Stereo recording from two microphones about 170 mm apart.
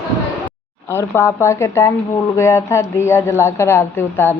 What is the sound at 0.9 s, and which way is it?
Speech, 15° left (ahead or behind).